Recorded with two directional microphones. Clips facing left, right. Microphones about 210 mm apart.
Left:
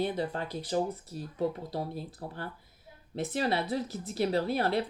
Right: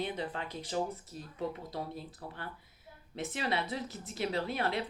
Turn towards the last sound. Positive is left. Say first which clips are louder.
# left 5 dB
turn(degrees=35)  # may be behind; listen again after turning